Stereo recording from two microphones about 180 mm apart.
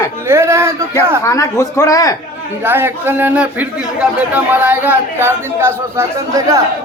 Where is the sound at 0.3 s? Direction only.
15° right (ahead or behind).